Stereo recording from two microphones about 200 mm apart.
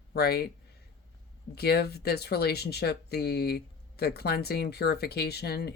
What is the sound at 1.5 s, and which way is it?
Speech, 50° left (ahead or behind).